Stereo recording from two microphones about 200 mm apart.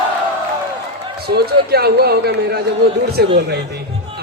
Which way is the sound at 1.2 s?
55° right (ahead or behind).